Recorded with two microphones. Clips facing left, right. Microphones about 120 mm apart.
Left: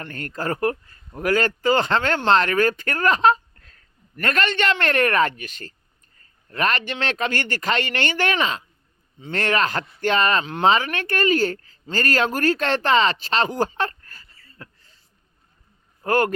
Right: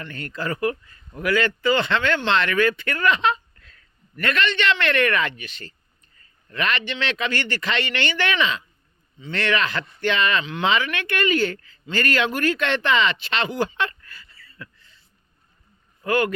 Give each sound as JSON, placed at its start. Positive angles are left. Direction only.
{"t": 0.0, "sound": "speech", "side_deg": 45}
{"t": 16.0, "sound": "speech", "side_deg": 45}